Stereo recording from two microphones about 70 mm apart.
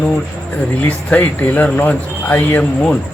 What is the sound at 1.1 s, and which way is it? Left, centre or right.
Speech, left.